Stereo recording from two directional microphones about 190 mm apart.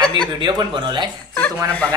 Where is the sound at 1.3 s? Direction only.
5° left (ahead or behind).